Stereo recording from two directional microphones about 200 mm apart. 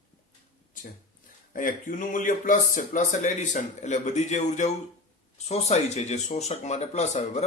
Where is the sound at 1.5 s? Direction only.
40° left (ahead or behind).